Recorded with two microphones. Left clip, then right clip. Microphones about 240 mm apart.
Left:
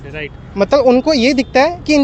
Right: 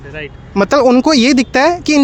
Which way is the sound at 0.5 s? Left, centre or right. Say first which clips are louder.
Right 1 dB; right.